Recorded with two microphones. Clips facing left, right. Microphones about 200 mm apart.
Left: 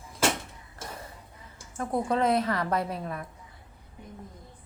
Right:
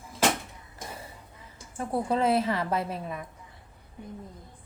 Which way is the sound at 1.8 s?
5° right (ahead or behind).